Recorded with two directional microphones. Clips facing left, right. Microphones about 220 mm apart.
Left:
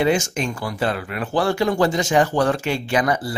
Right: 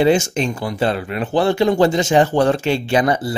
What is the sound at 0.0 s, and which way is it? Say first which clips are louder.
Speech: right 4 dB; 25° right (ahead or behind).